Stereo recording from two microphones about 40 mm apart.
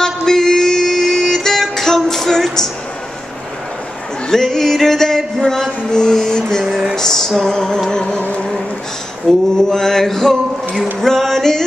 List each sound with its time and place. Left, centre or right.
0.3 s music: centre
4.3 s music: centre
9.3 s a sound: centre
9.6 s music: centre